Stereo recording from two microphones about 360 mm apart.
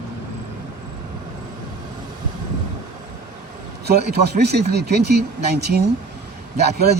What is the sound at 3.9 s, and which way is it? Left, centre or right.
Speech, right.